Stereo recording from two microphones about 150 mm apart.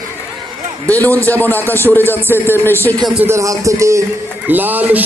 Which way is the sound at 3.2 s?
20° right (ahead or behind).